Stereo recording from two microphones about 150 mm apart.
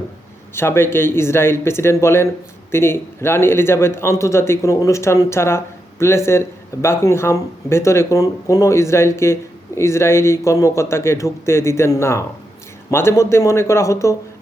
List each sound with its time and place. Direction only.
0.5 s a man's voice: 15° left (ahead or behind)